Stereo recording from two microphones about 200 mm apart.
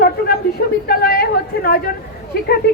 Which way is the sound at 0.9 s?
50° left (ahead or behind).